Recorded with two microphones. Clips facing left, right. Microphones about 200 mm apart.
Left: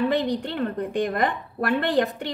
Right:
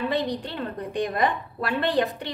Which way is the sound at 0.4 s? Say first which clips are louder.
Left 5 dB; 50° left (ahead or behind).